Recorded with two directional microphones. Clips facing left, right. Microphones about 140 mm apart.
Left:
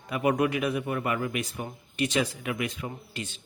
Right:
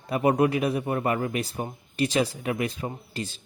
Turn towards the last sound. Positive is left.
turn(degrees=-35)  # may be behind; listen again after turning